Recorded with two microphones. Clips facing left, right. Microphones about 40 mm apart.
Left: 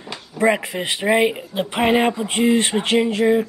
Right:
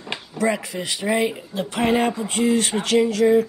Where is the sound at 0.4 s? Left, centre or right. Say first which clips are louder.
Left 5 dB; left.